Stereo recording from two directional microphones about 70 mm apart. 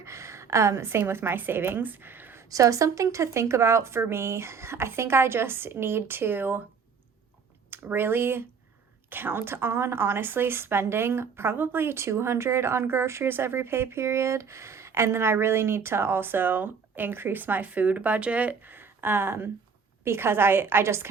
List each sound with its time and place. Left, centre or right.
0.0 s a woman's voice: right
2.5 s speech: right
7.9 s speech: right